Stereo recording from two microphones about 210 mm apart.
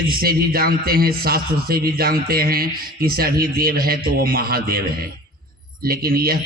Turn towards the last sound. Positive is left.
turn(degrees=-45)  # may be behind; listen again after turning